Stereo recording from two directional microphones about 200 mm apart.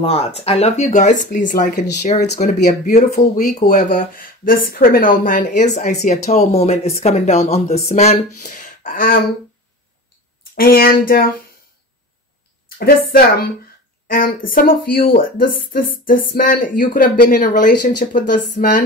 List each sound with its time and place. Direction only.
0.0 s speech: 30° left (ahead or behind)
3.1 s speech: 50° left (ahead or behind)
10.5 s speech: 45° left (ahead or behind)
12.6 s a woman's voice: 50° left (ahead or behind)